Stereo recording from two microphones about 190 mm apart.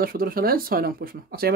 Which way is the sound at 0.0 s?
50° right (ahead or behind).